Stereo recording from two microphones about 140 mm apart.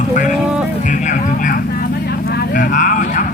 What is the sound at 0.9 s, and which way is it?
Music, 65° left (ahead or behind).